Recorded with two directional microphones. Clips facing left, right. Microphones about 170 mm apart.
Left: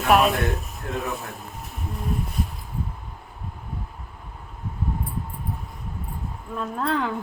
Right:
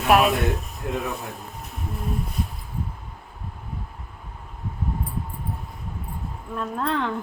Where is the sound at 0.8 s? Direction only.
20° right (ahead or behind).